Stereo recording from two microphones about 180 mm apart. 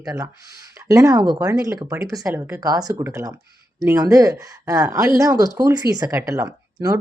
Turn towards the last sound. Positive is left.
turn(degrees=-20)  # may be behind; listen again after turning